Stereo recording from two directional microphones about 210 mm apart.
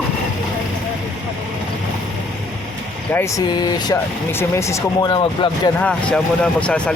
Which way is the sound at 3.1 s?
10° left (ahead or behind).